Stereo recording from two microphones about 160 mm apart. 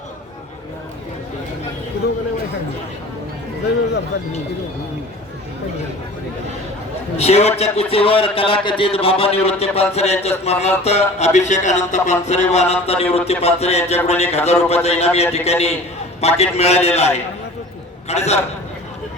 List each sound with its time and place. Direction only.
7.2 s a man's voice: 40° left (ahead or behind)